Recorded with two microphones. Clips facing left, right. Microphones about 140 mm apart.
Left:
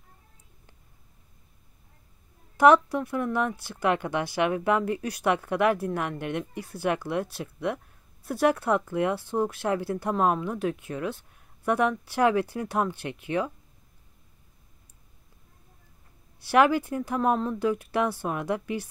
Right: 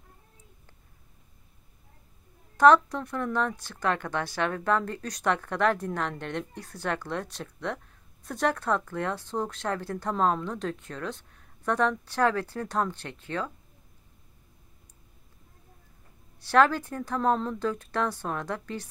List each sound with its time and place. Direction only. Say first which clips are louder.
2.5 s speech: left 1 dB; 10° left (ahead or behind)
16.3 s speech: left 1 dB; 10° left (ahead or behind)